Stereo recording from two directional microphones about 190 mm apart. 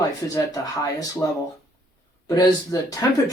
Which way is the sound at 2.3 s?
20° left (ahead or behind).